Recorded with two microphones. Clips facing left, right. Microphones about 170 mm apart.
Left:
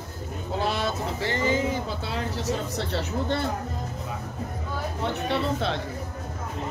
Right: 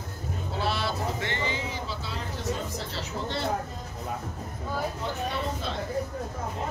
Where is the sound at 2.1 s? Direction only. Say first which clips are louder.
Left 4 dB; 70° left (ahead or behind).